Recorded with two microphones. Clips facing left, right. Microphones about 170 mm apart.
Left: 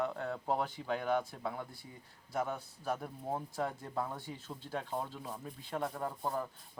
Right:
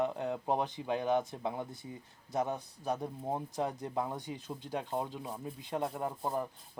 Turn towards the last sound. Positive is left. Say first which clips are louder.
# right 2 dB
turn(degrees=-15)  # may be behind; listen again after turning